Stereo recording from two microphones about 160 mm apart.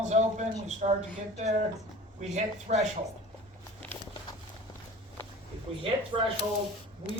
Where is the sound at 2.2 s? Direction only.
45° right (ahead or behind).